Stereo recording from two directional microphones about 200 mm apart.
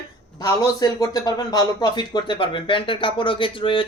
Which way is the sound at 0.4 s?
15° left (ahead or behind).